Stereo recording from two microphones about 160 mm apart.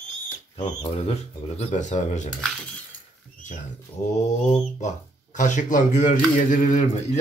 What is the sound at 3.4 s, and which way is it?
Speech, 45° left (ahead or behind).